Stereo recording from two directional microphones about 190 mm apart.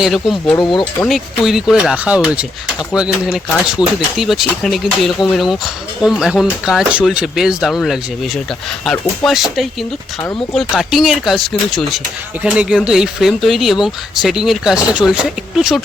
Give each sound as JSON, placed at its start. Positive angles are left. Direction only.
{"t": 0.0, "sound": "speech", "side_deg": 0}
{"t": 0.6, "sound": "speech", "side_deg": 25}
{"t": 1.0, "sound": "speech", "side_deg": 0}